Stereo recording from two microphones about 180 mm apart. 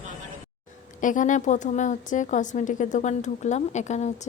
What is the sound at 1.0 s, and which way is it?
A woman's voice, 45° left (ahead or behind).